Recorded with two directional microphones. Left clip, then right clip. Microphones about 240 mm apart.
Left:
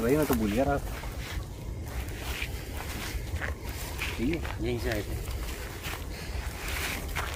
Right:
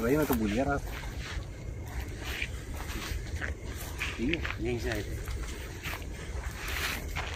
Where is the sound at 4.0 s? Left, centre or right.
Centre.